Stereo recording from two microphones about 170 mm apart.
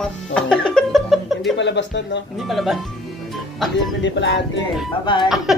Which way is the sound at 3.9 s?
90° left.